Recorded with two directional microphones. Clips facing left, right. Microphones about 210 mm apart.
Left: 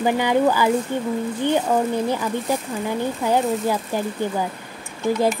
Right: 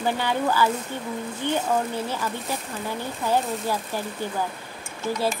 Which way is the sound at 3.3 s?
15° left (ahead or behind).